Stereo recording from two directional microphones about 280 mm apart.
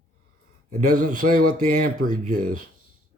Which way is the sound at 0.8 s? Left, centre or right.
Right.